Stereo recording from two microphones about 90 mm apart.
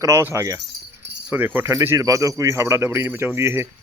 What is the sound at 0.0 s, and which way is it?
Speech, 30° right (ahead or behind).